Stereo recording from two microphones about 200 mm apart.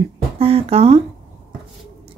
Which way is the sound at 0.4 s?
30° right (ahead or behind).